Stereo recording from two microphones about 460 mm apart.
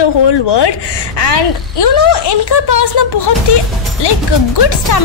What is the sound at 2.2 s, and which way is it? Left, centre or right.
A woman's voice, left.